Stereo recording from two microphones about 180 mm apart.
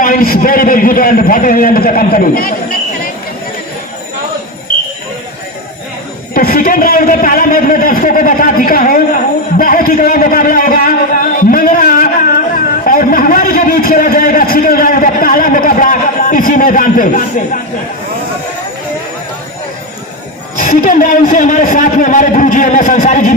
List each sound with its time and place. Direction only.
0.0 s a man's voice: 50° left (ahead or behind)
6.3 s a man's voice: 50° left (ahead or behind)
9.6 s a sound: 50° left (ahead or behind)
12.8 s a man's voice: 50° left (ahead or behind)
20.6 s a man's voice: 45° left (ahead or behind)